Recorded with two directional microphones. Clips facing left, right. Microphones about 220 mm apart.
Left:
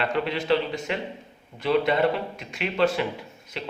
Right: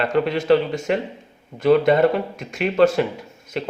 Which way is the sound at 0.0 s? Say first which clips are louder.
Right 6 dB; 45° right (ahead or behind).